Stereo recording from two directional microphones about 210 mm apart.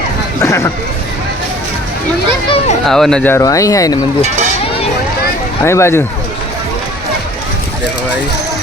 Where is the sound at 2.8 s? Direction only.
Centre (ahead or behind).